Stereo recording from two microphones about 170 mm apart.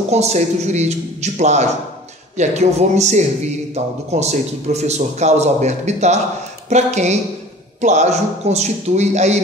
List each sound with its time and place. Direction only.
0.1 s a man's voice: 40° right (ahead or behind)